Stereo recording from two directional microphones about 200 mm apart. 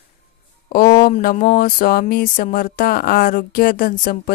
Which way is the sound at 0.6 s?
45° left (ahead or behind).